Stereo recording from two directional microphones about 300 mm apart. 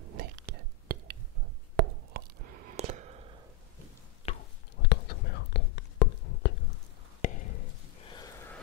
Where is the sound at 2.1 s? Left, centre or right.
Right.